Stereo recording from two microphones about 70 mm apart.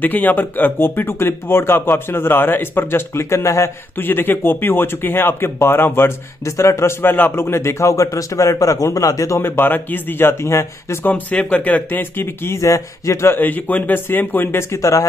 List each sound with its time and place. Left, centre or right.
0.0 s a man's voice: left
4.1 s a man's voice: left
9.4 s a man's voice: left
11.1 s a man's voice: left
12.4 s a man's voice: left
13.3 s a man's voice: left
14.8 s a man's voice: left